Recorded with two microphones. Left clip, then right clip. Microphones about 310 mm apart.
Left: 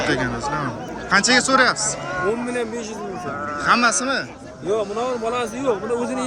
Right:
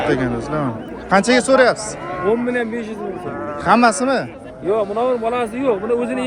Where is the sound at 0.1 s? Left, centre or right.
Centre.